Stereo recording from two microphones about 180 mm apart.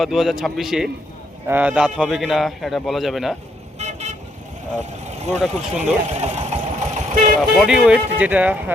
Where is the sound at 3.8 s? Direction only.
40° right (ahead or behind).